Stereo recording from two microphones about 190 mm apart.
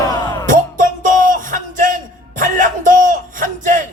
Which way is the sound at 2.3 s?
45° right (ahead or behind).